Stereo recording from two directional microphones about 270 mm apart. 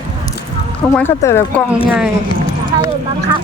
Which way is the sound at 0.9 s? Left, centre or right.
Centre.